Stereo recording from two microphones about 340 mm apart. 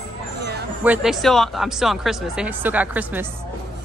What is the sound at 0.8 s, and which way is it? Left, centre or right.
Speech, centre.